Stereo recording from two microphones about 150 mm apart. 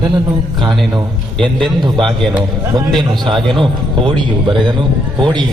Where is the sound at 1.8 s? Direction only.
30° right (ahead or behind).